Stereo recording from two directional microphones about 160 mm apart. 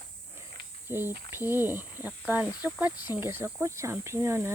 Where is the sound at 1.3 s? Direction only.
15° right (ahead or behind).